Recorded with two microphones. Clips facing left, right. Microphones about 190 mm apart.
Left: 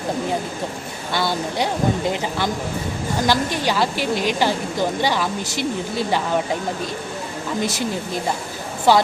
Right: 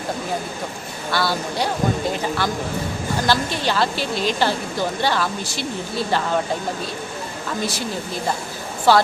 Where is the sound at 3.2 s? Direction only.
15° left (ahead or behind).